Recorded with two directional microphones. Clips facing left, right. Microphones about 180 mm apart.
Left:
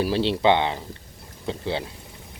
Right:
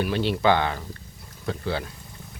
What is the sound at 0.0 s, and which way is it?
Speech, 30° left (ahead or behind).